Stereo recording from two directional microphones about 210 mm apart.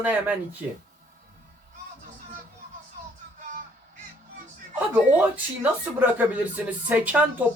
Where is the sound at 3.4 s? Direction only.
40° right (ahead or behind).